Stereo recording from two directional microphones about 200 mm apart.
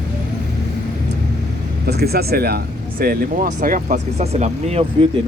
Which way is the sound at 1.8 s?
55° right (ahead or behind).